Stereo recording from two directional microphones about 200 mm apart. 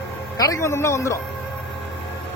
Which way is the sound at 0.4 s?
15° left (ahead or behind).